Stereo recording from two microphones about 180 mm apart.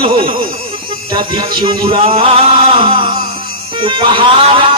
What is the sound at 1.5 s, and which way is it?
Music, 30° right (ahead or behind).